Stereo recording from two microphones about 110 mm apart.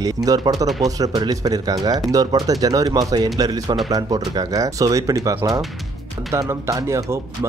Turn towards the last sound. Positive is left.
turn(degrees=-25)  # may be behind; listen again after turning